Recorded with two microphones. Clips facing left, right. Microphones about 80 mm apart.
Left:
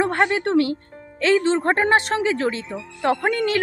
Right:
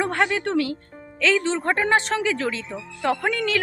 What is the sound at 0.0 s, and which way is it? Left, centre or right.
A woman's voice, left.